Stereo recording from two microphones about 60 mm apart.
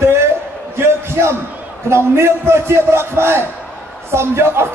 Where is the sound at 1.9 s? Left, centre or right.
Right.